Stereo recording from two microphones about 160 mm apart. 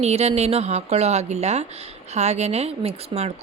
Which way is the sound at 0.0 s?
40° right (ahead or behind).